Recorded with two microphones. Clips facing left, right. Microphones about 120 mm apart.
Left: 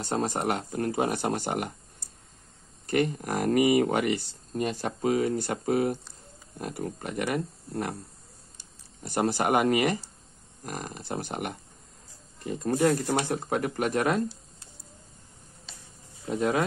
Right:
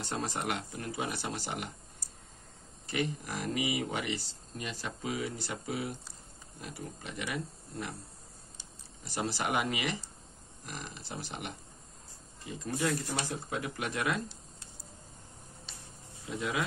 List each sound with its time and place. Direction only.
0.0 s speech: 40° left (ahead or behind)
2.9 s speech: 50° left (ahead or behind)
9.0 s speech: 50° left (ahead or behind)
16.3 s speech: 45° left (ahead or behind)